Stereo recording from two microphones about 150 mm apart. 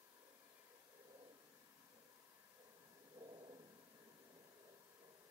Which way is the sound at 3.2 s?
35° right (ahead or behind).